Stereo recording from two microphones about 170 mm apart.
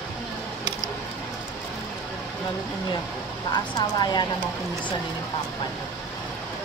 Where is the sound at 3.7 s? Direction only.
25° left (ahead or behind).